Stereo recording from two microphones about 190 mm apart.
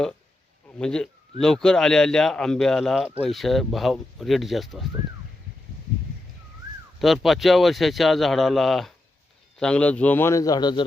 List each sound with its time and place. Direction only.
0.8 s a man's voice: 5° left (ahead or behind)
7.0 s a man's voice: centre (ahead or behind); by 10.8 s 25° left (ahead or behind)